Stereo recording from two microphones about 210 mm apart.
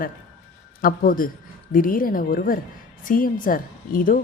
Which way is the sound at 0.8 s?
40° left (ahead or behind).